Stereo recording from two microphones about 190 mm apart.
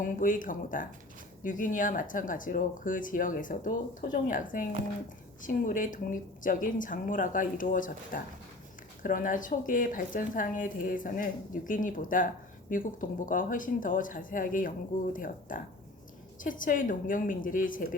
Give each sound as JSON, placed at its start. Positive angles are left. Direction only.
{"t": 0.0, "sound": "speech", "side_deg": 45}